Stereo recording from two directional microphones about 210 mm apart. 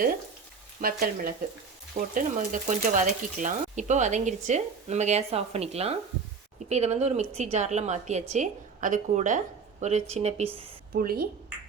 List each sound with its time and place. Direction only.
0.8 s frying: 45° right (ahead or behind)
2.0 s speech: 40° right (ahead or behind)
10.9 s frying: 45° right (ahead or behind)